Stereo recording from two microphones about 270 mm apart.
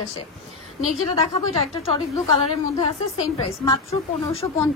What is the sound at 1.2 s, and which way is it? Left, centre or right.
Speech, left.